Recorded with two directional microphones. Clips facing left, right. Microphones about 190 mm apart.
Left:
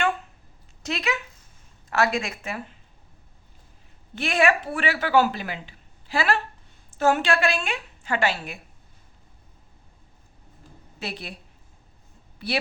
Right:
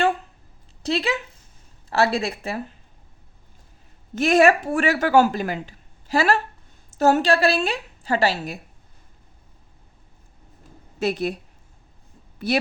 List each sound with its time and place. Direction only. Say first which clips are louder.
0.8 s a woman's voice: right 5 dB; 30° right (ahead or behind)
4.1 s a woman's voice: right 6 dB; 40° right (ahead or behind)
11.0 s speech: right 12 dB; 45° right (ahead or behind)
12.4 s speech: right 6 dB; 45° right (ahead or behind)